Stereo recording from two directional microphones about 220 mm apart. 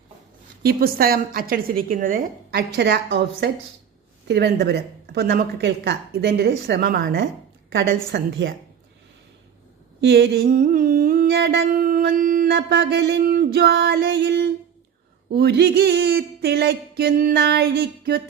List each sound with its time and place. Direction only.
0.6 s a woman's voice: 40° right (ahead or behind)
4.3 s humming: 50° right (ahead or behind)
7.7 s a woman's voice: 60° right (ahead or behind)
10.0 s humming: 50° right (ahead or behind)